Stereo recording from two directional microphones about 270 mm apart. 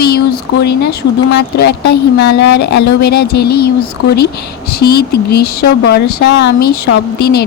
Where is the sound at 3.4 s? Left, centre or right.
Left.